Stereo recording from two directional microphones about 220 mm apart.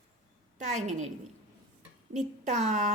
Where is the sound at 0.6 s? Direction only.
30° right (ahead or behind).